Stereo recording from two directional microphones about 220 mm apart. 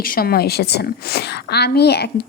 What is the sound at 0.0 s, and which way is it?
A woman's voice, 40° left (ahead or behind).